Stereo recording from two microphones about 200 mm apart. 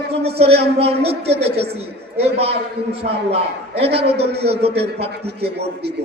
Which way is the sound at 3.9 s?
55° right (ahead or behind).